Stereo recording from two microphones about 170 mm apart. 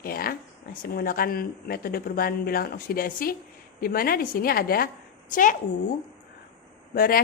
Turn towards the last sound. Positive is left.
turn(degrees=60)  # may be behind; listen again after turning